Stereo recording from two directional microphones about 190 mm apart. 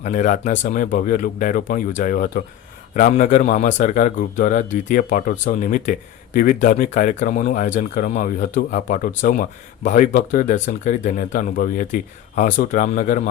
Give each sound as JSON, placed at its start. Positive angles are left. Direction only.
{"t": 0.0, "sound": "a man's voice", "side_deg": 40}